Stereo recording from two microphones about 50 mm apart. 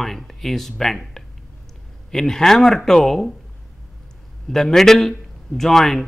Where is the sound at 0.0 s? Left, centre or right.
Centre.